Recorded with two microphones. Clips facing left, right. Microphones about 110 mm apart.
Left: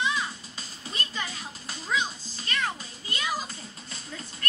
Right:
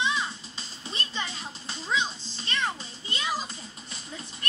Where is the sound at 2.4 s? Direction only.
25° right (ahead or behind).